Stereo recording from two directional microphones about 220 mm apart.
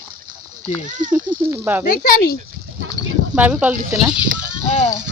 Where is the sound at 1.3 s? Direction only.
10° right (ahead or behind).